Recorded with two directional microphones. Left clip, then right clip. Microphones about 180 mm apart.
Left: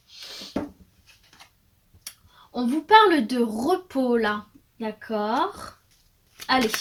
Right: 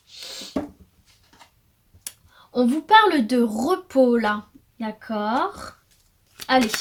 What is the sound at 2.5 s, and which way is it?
Speech, 45° right (ahead or behind).